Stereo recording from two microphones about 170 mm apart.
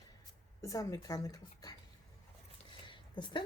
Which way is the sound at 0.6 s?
20° left (ahead or behind).